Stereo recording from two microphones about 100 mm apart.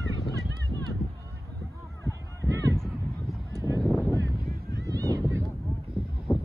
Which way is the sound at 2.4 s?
30° right (ahead or behind).